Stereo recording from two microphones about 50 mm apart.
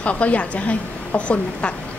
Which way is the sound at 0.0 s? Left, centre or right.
Left.